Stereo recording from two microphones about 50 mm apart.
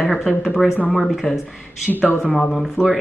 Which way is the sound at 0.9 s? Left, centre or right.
Centre.